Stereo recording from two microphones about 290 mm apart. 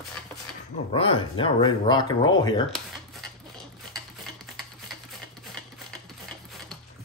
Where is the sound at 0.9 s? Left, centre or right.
Centre.